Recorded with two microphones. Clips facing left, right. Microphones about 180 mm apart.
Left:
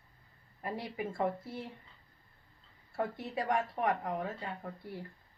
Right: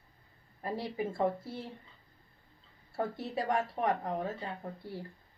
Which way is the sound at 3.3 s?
30° right (ahead or behind).